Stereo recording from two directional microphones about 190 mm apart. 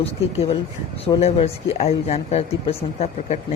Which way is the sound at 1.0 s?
30° left (ahead or behind).